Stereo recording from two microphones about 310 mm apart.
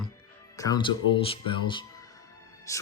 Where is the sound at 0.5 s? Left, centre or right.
Centre.